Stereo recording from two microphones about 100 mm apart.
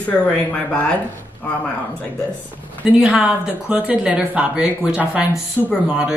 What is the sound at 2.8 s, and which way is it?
Speech, 10° right (ahead or behind).